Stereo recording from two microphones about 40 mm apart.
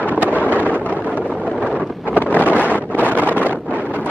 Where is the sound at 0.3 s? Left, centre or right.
Left.